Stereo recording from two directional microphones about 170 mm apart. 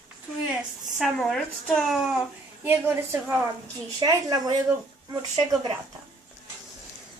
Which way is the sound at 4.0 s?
20° right (ahead or behind).